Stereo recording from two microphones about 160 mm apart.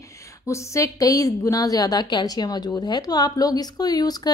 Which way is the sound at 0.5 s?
20° left (ahead or behind).